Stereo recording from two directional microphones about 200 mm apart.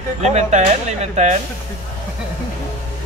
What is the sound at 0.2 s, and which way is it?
Speech, 35° right (ahead or behind).